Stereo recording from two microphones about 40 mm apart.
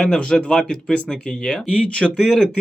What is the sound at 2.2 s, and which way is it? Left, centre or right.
Speech, centre.